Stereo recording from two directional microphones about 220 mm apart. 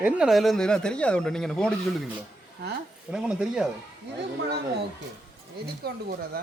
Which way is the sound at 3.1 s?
5° right (ahead or behind).